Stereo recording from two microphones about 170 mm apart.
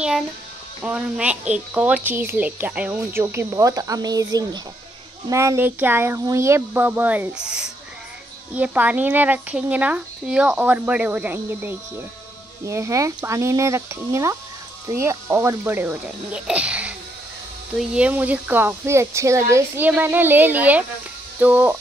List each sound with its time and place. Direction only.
0.8 s speech: 5° right (ahead or behind)